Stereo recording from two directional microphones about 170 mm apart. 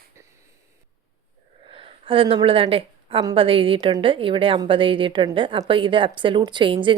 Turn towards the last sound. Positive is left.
turn(degrees=-30)  # may be behind; listen again after turning